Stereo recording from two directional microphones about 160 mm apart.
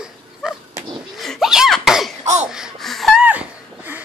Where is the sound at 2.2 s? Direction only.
45° right (ahead or behind).